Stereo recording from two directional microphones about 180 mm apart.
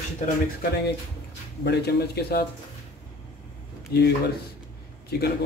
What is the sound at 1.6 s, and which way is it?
Speech, 65° left (ahead or behind).